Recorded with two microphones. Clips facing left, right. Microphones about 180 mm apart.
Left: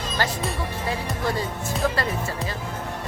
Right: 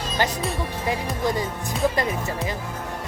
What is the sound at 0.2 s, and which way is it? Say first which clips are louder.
Speech: right 2 dB; 20° right (ahead or behind).